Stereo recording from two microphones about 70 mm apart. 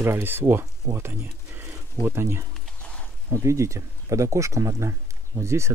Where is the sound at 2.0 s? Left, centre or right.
Right.